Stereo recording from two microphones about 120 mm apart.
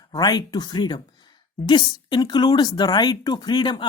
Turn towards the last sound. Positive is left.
turn(degrees=40)  # may be behind; listen again after turning